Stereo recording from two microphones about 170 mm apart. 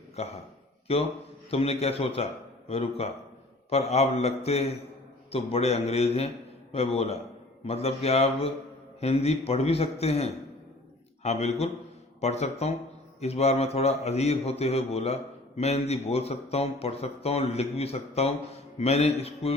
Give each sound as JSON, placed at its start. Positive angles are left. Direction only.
{"t": 0.2, "sound": "a man's voice", "side_deg": 40}